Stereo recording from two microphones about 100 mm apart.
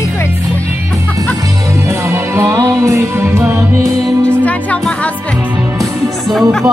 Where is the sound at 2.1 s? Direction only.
30° right (ahead or behind).